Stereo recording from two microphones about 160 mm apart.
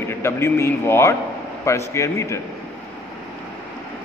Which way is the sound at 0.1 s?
15° left (ahead or behind).